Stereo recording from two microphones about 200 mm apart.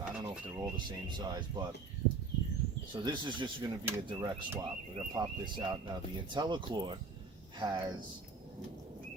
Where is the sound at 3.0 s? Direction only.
25° right (ahead or behind).